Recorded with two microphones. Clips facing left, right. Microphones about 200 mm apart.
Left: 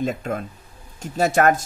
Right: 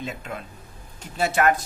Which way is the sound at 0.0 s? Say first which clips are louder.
Left 8 dB; 45° left (ahead or behind).